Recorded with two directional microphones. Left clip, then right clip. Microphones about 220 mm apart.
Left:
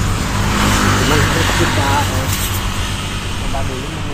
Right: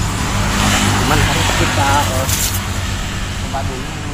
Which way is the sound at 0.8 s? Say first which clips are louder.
Left 1 dB; centre (ahead or behind).